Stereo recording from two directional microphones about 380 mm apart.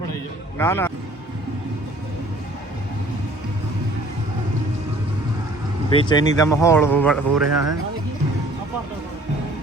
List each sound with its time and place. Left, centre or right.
0.6 s speech: centre
5.9 s speech: centre
7.5 s speech: right